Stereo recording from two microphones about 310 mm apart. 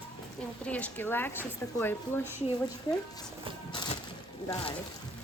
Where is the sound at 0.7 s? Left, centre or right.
Centre.